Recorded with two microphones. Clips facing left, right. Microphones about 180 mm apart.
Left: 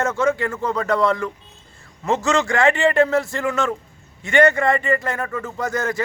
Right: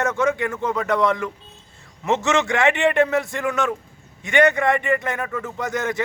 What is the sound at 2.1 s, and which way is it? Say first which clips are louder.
Speech: even; 20° right (ahead or behind).